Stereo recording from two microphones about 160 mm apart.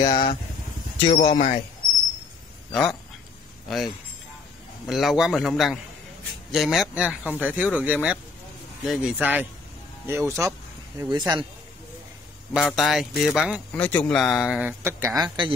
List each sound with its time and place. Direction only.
0.0 s speech: 25° left (ahead or behind)
0.9 s speech: 35° left (ahead or behind)
2.7 s a man's voice: 5° left (ahead or behind); by 11.4 s 25° right (ahead or behind)
12.5 s speech: centre (ahead or behind); by 15.1 s 20° right (ahead or behind)
15.2 s speech: 30° right (ahead or behind)